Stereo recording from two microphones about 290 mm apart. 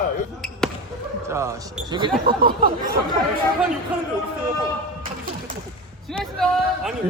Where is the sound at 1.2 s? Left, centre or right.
Centre.